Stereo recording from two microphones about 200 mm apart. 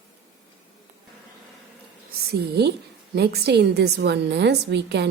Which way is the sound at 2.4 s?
55° right (ahead or behind).